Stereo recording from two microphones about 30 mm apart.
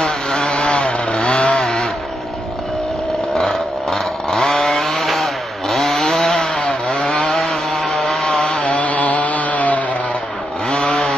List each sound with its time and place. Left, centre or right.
0.0 s chainsaw: left
3.3 s chainsaw: centre
7.3 s chainsaw: centre
8.3 s chainsaw: left
8.6 s chainsaw: left
10.7 s chainsaw: left